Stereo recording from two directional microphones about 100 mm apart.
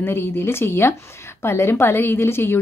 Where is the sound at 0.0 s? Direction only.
25° left (ahead or behind).